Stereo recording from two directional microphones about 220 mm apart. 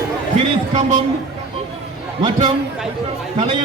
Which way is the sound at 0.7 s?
30° right (ahead or behind).